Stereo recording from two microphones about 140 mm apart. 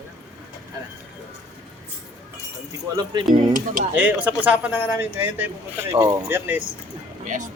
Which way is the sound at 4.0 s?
10° right (ahead or behind).